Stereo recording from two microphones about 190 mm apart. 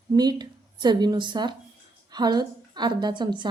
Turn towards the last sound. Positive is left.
turn(degrees=-25)  # may be behind; listen again after turning